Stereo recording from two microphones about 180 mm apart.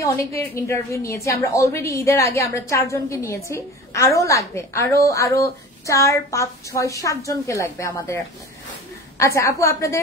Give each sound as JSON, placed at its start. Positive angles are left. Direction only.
{"t": 0.0, "sound": "a woman's voice", "side_deg": 15}
{"t": 9.2, "sound": "a woman's voice", "side_deg": 15}